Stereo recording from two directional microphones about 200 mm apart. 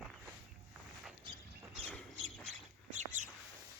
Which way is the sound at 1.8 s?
Centre (ahead or behind).